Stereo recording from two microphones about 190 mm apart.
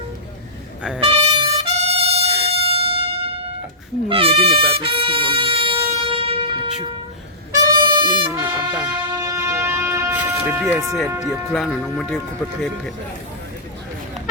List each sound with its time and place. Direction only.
1.0 s trumpet: 30° right (ahead or behind)
4.1 s music: 30° right (ahead or behind)
7.5 s music: 20° right (ahead or behind)
8.4 s music: 5° right (ahead or behind)
11.3 s speech: centre (ahead or behind)